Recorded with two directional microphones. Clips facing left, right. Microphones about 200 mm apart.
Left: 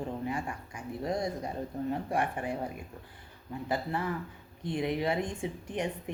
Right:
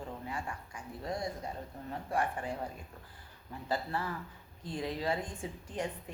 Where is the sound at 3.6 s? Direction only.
20° left (ahead or behind).